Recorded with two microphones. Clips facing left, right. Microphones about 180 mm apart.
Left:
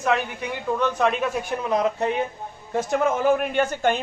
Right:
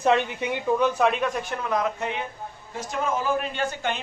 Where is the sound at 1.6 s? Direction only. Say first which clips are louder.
Left 4 dB; 30° left (ahead or behind).